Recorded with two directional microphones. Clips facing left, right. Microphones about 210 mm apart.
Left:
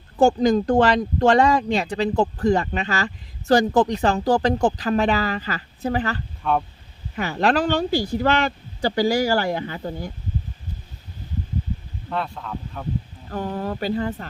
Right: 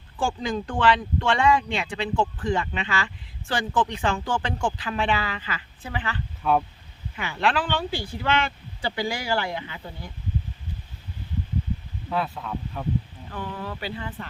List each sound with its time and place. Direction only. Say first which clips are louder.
0.2 s speech: left 10 dB; 40° left (ahead or behind)
6.4 s speech: even; 5° right (ahead or behind)
7.2 s speech: left 5 dB; 40° left (ahead or behind)
12.0 s speech: even; 5° right (ahead or behind)
13.3 s speech: left 7 dB; 45° left (ahead or behind)